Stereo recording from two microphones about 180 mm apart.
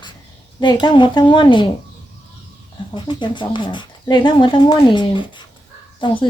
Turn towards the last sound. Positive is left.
turn(degrees=25)  # may be behind; listen again after turning